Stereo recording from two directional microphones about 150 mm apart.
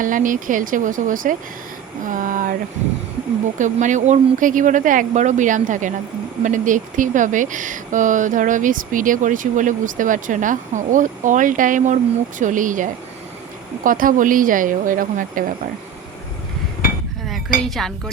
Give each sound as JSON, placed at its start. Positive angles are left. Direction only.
{"t": 0.0, "sound": "speech", "side_deg": -65}
{"t": 2.0, "sound": "a sound", "side_deg": -60}
{"t": 3.6, "sound": "speech", "side_deg": -55}
{"t": 17.6, "sound": "speech", "side_deg": 0}